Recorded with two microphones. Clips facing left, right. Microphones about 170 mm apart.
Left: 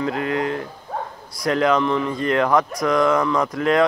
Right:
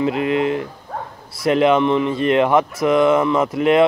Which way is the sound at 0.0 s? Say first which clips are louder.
Right 4 dB; 20° right (ahead or behind).